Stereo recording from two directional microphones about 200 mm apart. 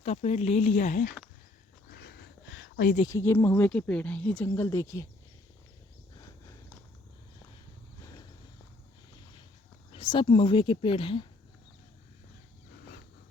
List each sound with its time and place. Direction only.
0.0 s speech: 35° left (ahead or behind)
1.9 s a sound: 55° left (ahead or behind)
3.1 s speech: 15° left (ahead or behind)
6.1 s walk: 15° left (ahead or behind)
9.9 s speech: 25° left (ahead or behind)